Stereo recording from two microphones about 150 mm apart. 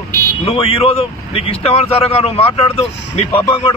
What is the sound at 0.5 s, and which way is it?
Speech, 40° left (ahead or behind).